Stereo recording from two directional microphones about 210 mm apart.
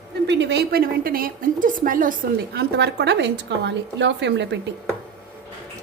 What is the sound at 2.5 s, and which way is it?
A woman's voice, 50° right (ahead or behind).